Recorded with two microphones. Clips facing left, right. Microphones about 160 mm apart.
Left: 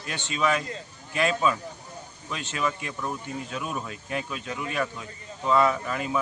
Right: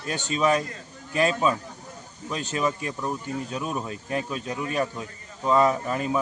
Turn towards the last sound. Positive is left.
turn(degrees=-35)  # may be behind; listen again after turning